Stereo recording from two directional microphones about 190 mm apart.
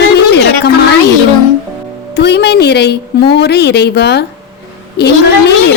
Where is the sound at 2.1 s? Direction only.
60° left (ahead or behind).